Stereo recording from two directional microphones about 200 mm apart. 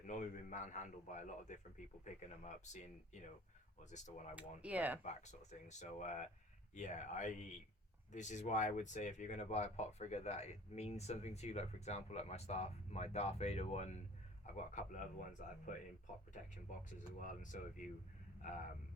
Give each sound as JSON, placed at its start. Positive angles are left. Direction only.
{"t": 0.0, "sound": "speech", "side_deg": 40}
{"t": 4.4, "sound": "speech", "side_deg": -5}
{"t": 5.0, "sound": "speech", "side_deg": 35}
{"t": 16.9, "sound": "speech", "side_deg": 40}